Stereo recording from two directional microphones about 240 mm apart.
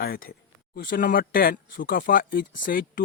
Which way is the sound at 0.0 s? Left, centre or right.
Left.